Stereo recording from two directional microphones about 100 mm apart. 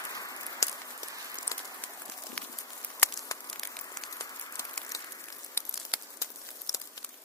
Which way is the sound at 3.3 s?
35° left (ahead or behind).